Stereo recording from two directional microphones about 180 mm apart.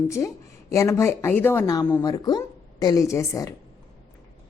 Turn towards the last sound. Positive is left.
turn(degrees=15)  # may be behind; listen again after turning